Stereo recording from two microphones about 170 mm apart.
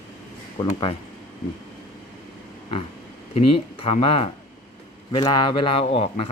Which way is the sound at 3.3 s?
30° left (ahead or behind).